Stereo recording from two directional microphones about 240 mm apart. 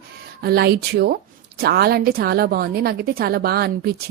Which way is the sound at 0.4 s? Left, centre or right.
Right.